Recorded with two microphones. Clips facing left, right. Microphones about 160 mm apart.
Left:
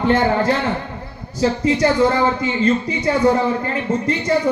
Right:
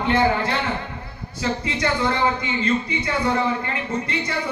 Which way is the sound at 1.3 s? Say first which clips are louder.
Left 8 dB; 40° left (ahead or behind).